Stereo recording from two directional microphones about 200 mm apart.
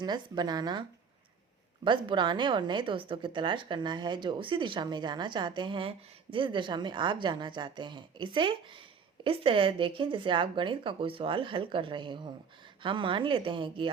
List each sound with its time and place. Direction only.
0.0 s a woman's voice: 20° right (ahead or behind)